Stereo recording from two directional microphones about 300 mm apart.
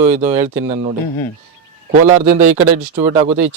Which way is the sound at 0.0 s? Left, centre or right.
Right.